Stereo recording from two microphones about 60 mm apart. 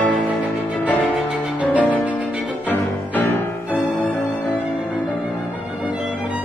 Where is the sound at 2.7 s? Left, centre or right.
Left.